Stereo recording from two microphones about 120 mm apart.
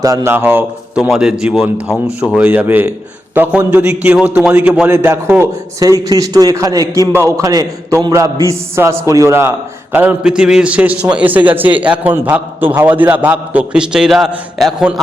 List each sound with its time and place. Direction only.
0.0 s a man's voice: 25° right (ahead or behind)
1.0 s a man's voice: 5° right (ahead or behind)